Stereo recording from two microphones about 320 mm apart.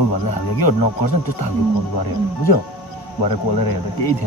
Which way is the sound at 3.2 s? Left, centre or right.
Left.